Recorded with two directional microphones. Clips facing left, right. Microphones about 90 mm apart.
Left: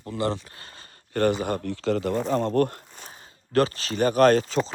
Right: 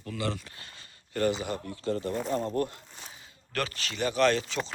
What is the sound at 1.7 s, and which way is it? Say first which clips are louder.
Speech: left 5 dB; 90° left.